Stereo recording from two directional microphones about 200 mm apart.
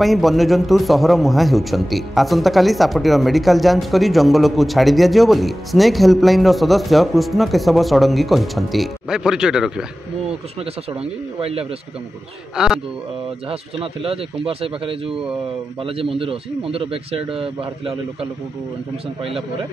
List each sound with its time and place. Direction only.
0.0 s a man's voice: centre (ahead or behind)
10.6 s a man's voice: 25° right (ahead or behind)
12.5 s a man's voice: 5° right (ahead or behind)
13.5 s a man's voice: 30° right (ahead or behind)
15.0 s a man's voice: 5° right (ahead or behind)
15.8 s a man's voice: 30° right (ahead or behind)